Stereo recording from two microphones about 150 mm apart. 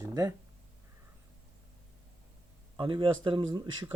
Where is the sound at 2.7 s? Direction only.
35° right (ahead or behind).